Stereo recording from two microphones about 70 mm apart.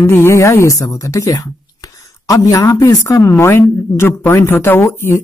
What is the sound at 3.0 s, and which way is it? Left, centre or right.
Speech, left.